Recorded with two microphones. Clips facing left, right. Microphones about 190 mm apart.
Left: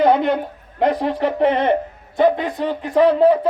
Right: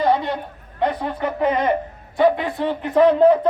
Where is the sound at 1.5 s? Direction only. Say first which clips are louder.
Left 1 dB; 30° left (ahead or behind).